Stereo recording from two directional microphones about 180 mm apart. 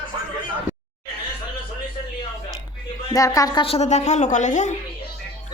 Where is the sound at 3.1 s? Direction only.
20° left (ahead or behind).